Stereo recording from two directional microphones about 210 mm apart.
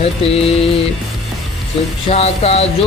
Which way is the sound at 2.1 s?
30° left (ahead or behind).